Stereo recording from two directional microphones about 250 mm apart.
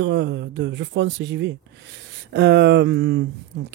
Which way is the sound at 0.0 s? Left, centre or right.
Right.